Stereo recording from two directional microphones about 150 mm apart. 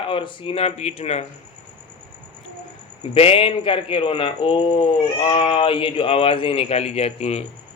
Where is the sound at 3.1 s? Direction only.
40° left (ahead or behind).